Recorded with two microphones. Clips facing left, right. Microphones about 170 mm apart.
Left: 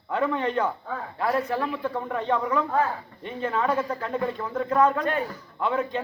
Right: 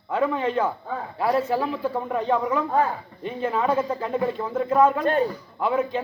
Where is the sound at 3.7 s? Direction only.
25° right (ahead or behind).